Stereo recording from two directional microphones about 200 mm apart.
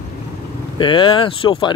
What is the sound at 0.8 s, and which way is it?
Speech, 25° left (ahead or behind).